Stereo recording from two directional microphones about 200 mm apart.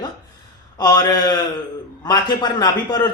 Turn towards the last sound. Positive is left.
turn(degrees=20)  # may be behind; listen again after turning